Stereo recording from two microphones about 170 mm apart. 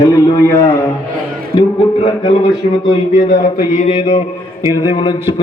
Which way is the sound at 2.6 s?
45° left (ahead or behind).